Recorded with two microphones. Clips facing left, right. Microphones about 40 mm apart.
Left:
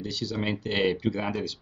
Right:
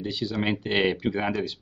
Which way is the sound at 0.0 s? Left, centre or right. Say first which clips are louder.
Right 3 dB; right.